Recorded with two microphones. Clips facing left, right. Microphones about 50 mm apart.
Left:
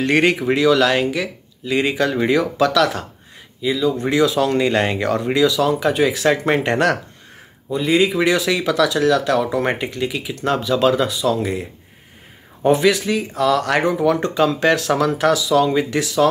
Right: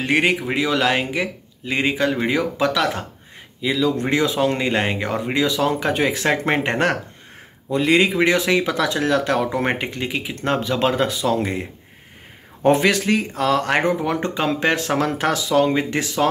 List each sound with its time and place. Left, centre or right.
0.0 s speech: centre
0.7 s speech: right
3.6 s speech: right
4.0 s speech: right
5.4 s speech: right
7.7 s speech: right
12.6 s speech: right
13.4 s speech: right